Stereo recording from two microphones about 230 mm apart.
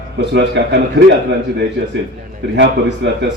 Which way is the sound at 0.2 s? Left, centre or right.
Right.